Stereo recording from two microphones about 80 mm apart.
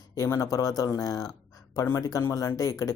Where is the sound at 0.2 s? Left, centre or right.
Left.